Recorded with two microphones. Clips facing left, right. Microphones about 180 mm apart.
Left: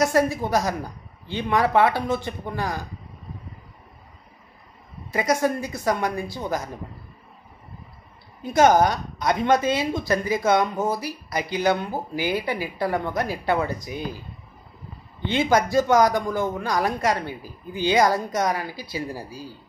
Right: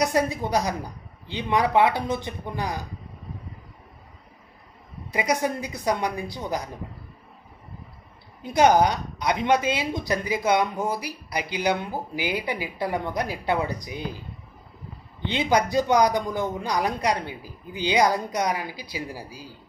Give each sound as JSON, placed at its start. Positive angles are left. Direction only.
{"t": 0.3, "sound": "a woman's voice", "side_deg": -15}
{"t": 5.1, "sound": "a woman's voice", "side_deg": -15}
{"t": 8.4, "sound": "a woman's voice", "side_deg": -15}
{"t": 15.2, "sound": "a woman's voice", "side_deg": -20}